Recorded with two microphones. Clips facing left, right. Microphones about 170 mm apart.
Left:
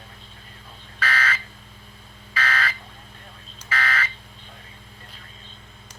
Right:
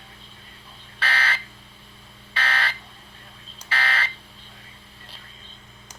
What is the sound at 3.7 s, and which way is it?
Fire alarm, 30° right (ahead or behind).